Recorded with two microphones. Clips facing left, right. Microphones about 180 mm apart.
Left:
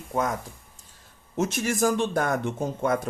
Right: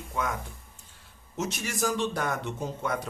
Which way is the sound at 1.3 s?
50° left (ahead or behind).